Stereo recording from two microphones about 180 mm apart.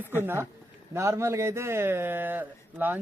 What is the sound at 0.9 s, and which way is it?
Speech, 15° right (ahead or behind).